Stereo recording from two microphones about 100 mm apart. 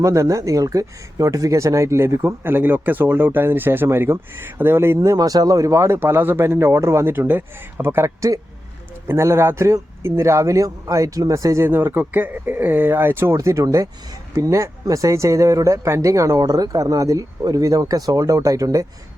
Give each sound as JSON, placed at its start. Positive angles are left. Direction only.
{"t": 0.0, "sound": "speech", "side_deg": -30}
{"t": 4.9, "sound": "speech", "side_deg": -35}